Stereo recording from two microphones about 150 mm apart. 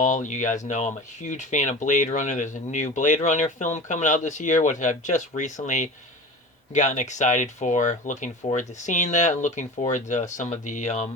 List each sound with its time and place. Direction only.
0.0 s speech: 55° left (ahead or behind)